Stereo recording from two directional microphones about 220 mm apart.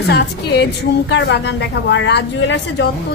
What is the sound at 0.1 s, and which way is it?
A woman's voice, 50° left (ahead or behind).